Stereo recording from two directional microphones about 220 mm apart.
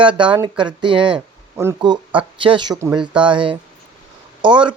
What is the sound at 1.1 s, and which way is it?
Speech, 10° right (ahead or behind).